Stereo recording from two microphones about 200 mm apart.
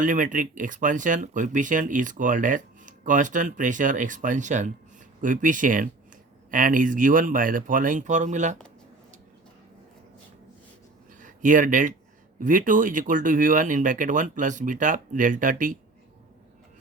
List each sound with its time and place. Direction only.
0.0 s speech: 40° right (ahead or behind)
11.2 s speech: 40° right (ahead or behind)